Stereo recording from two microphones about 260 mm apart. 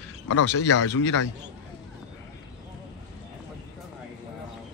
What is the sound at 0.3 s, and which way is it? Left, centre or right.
Speech, left.